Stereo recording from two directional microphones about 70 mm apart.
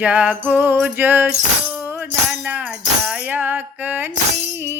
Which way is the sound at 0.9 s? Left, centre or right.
Right.